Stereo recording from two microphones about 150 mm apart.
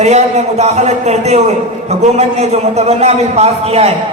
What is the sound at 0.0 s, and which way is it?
A man's voice, 45° right (ahead or behind).